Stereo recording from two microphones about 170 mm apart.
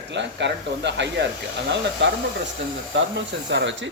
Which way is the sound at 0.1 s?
90° right.